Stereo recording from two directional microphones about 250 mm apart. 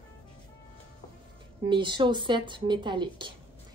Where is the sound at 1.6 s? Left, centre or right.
Centre.